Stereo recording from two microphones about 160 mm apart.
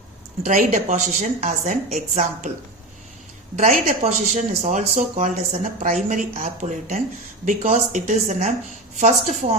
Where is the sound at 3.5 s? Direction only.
60° right (ahead or behind).